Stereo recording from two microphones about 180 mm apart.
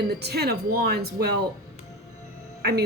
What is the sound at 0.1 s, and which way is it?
Speech, 65° right (ahead or behind).